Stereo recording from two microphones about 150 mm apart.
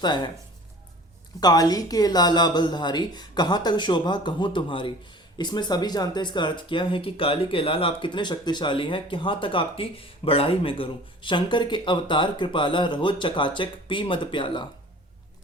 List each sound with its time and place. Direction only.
0.0 s speech: 30° left (ahead or behind)
1.4 s speech: 25° left (ahead or behind)